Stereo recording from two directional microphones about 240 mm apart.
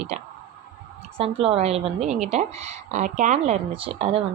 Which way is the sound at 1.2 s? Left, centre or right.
Right.